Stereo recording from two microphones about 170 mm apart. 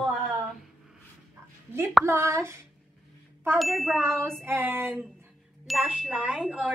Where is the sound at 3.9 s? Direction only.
15° right (ahead or behind).